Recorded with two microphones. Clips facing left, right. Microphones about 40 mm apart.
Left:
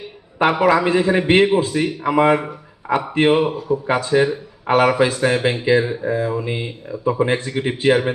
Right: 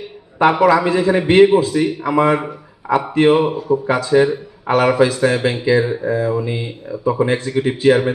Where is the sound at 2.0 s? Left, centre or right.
Centre.